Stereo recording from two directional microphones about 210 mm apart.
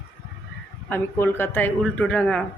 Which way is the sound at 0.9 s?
10° left (ahead or behind).